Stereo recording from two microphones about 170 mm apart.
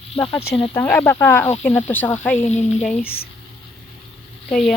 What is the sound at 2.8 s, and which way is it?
Speech, 10° left (ahead or behind).